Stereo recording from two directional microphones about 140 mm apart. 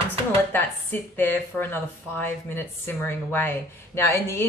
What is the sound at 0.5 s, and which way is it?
Speech, 15° left (ahead or behind).